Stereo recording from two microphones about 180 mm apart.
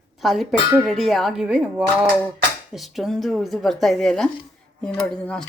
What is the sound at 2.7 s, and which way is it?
Speech, centre (ahead or behind).